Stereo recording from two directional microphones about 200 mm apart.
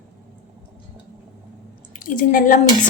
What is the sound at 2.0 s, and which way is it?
Speech, 40° left (ahead or behind).